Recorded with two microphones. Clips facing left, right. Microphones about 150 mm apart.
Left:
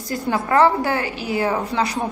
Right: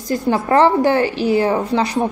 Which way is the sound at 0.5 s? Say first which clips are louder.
Right 3 dB; 25° right (ahead or behind).